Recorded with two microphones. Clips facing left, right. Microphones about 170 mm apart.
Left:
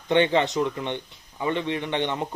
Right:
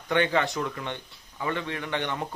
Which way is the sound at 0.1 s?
20° left (ahead or behind).